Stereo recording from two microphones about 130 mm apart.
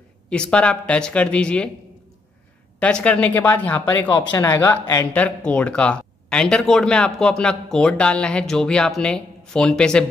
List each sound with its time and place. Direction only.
0.3 s speech: 10° left (ahead or behind)
2.8 s speech: 10° left (ahead or behind)